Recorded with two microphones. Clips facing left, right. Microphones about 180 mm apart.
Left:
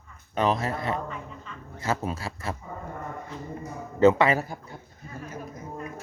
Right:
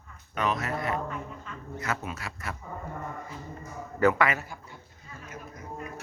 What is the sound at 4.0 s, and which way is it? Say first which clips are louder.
Speech: left 5 dB; 25° left (ahead or behind).